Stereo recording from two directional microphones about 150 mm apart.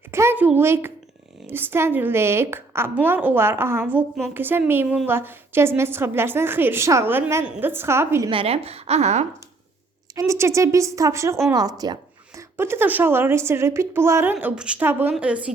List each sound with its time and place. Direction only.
0.1 s a sound: 15° right (ahead or behind)
1.5 s a woman's voice: 15° right (ahead or behind)
8.3 s a woman's voice: 40° right (ahead or behind)
10.2 s a woman's voice: 20° right (ahead or behind)
14.3 s a woman's voice: 5° right (ahead or behind)